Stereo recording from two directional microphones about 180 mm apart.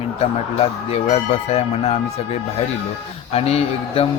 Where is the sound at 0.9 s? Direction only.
35° left (ahead or behind).